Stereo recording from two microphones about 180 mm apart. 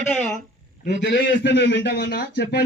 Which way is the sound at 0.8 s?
70° left (ahead or behind).